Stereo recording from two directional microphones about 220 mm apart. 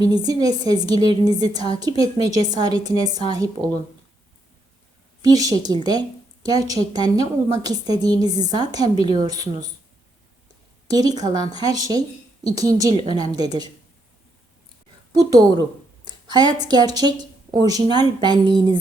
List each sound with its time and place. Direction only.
0.3 s a woman's voice: 20° right (ahead or behind)
5.2 s a woman's voice: 15° right (ahead or behind)
10.8 s a woman's voice: 15° right (ahead or behind)
15.1 s a woman's voice: 15° right (ahead or behind)
16.0 s a sound: 20° right (ahead or behind)
16.6 s a woman's voice: 20° right (ahead or behind)